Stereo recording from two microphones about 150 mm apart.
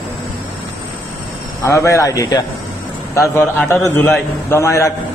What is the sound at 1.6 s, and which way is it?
A man's voice, 20° left (ahead or behind).